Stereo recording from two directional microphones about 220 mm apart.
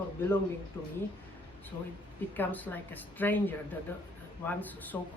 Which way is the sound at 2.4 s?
5° left (ahead or behind).